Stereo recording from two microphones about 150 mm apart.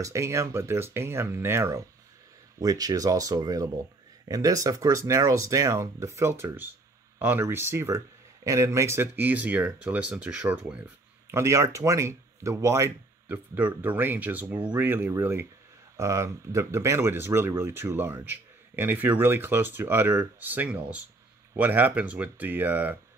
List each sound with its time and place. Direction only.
0.0 s speech: 20° right (ahead or behind)